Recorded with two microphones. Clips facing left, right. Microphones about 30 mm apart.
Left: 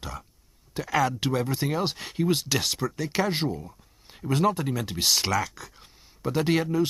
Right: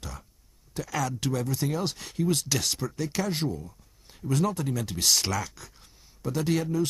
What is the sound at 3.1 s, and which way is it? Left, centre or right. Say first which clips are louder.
Speech: left 4 dB; left.